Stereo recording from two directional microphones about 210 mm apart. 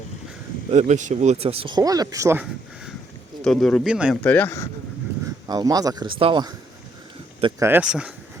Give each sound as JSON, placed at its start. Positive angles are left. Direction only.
{"t": 0.7, "sound": "speech", "side_deg": -35}
{"t": 3.4, "sound": "speech", "side_deg": 0}
{"t": 5.5, "sound": "speech", "side_deg": -20}
{"t": 7.6, "sound": "speech", "side_deg": -10}